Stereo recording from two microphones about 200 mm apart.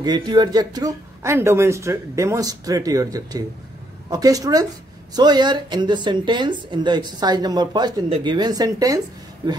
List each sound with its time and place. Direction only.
0.0 s a woman's voice: 20° right (ahead or behind)